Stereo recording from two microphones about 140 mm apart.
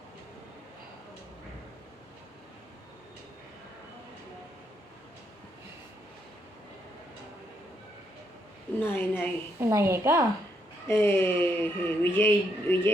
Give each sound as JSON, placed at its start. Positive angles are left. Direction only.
{"t": 8.8, "sound": "speech", "side_deg": 15}
{"t": 9.6, "sound": "a woman's voice", "side_deg": -20}
{"t": 10.8, "sound": "speech", "side_deg": 20}